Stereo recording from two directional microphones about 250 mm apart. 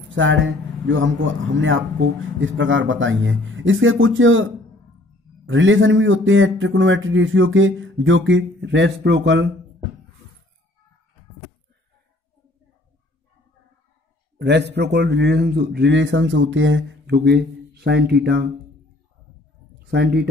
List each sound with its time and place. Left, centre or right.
0.1 s speech: right
5.5 s speech: right
14.4 s speech: right
19.9 s speech: right